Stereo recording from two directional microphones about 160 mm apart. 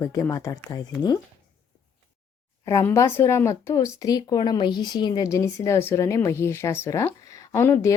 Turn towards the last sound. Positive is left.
turn(degrees=15)  # may be behind; listen again after turning